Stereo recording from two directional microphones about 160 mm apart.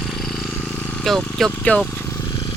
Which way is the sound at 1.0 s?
Centre (ahead or behind).